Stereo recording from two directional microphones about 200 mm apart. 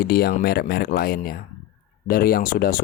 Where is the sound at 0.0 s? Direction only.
50° left (ahead or behind).